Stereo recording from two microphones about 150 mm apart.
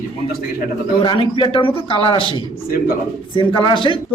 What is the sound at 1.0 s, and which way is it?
A man's voice, 35° left (ahead or behind).